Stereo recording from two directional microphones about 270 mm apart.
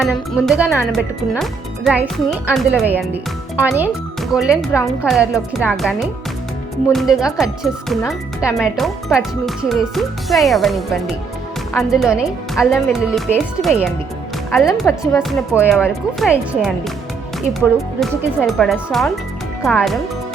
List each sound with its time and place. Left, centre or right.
0.0 s speech: centre
4.7 s a woman's voice: centre
5.1 s speech: centre
18.0 s speech: centre